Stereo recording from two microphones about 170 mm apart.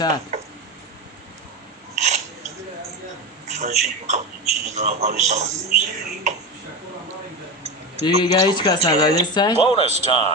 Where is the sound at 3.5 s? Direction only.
40° right (ahead or behind).